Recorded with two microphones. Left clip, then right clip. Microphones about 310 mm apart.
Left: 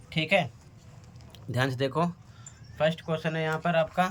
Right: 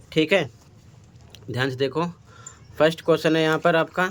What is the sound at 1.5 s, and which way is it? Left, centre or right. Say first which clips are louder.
Speech: right 4 dB; centre.